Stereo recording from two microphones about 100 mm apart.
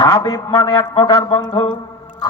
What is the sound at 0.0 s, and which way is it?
A man's voice, 35° left (ahead or behind).